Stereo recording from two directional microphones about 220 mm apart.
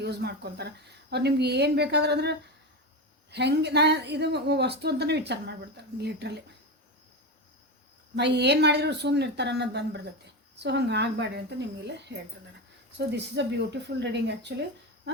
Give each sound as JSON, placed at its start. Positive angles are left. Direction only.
{"t": 0.0, "sound": "a woman's voice", "side_deg": -50}
{"t": 8.1, "sound": "a woman's voice", "side_deg": -50}